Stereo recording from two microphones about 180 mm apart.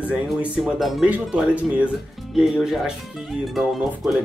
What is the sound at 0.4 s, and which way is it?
Speech, centre (ahead or behind).